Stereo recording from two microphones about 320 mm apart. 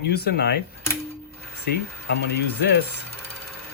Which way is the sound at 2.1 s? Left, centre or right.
Left.